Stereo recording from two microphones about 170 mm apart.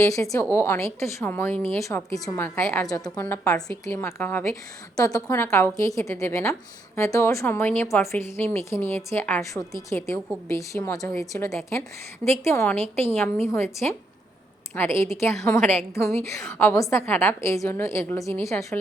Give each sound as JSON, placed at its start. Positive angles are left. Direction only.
{"t": 0.0, "sound": "a woman's voice", "side_deg": 20}
{"t": 12.8, "sound": "a woman's voice", "side_deg": -35}
{"t": 13.1, "sound": "a woman's voice", "side_deg": 5}